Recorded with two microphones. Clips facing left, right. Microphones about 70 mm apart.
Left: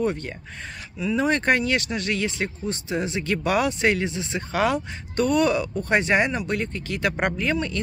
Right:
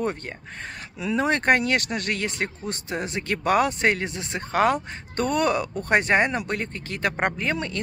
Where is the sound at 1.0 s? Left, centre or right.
Right.